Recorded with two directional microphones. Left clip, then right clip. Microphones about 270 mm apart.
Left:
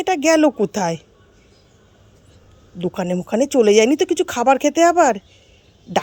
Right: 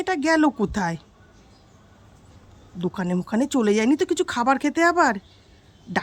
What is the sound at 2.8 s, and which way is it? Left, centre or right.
Speech, centre.